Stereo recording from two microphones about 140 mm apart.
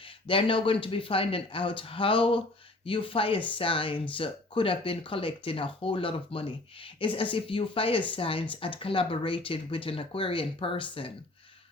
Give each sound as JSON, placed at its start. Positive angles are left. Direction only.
{"t": 0.0, "sound": "speech", "side_deg": 40}